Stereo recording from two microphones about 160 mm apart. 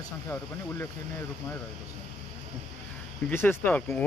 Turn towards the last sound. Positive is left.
turn(degrees=10)  # may be behind; listen again after turning